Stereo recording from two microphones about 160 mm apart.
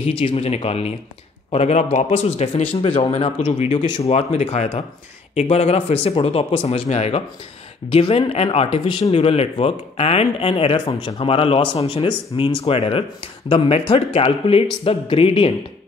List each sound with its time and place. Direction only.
0.0 s a man's voice: 40° left (ahead or behind)
3.8 s speech: 30° left (ahead or behind)
4.1 s speech: 40° left (ahead or behind)